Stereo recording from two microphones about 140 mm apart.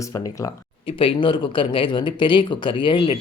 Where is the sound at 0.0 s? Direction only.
25° left (ahead or behind).